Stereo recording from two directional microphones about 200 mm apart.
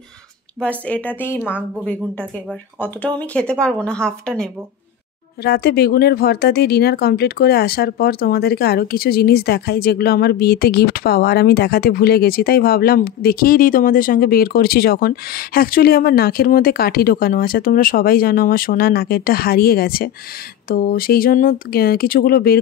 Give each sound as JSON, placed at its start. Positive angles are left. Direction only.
{"t": 0.6, "sound": "a woman's voice", "side_deg": 5}
{"t": 5.4, "sound": "speech", "side_deg": 50}